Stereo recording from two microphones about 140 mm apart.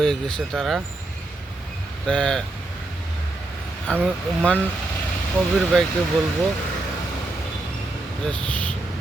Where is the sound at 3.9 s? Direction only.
5° left (ahead or behind).